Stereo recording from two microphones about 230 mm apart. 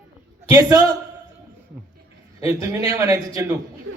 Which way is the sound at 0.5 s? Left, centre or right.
Centre.